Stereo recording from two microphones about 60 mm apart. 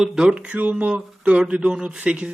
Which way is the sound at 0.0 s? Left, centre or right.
Centre.